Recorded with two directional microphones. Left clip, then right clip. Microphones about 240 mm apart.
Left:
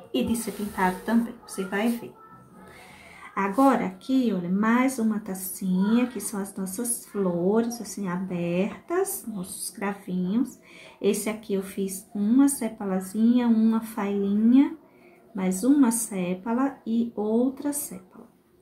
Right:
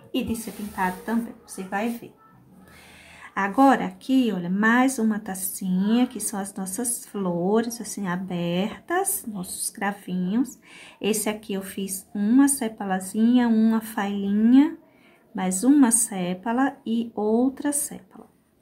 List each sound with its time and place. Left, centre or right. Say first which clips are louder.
0.1 s a woman's voice: left 1 dB; centre
3.3 s a woman's voice: right 3 dB; right